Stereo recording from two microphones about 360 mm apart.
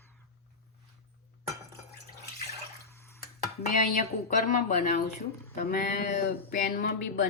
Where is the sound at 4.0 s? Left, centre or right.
Left.